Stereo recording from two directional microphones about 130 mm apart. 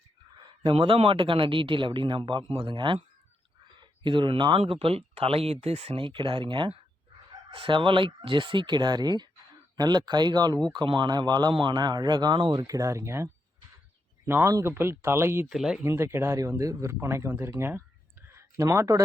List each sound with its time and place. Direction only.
0.3 s a man's voice: 35° right (ahead or behind); by 15.4 s 20° right (ahead or behind)
15.4 s speech: 5° right (ahead or behind)
15.8 s speech: 20° right (ahead or behind)
18.3 s a sound: 20° right (ahead or behind)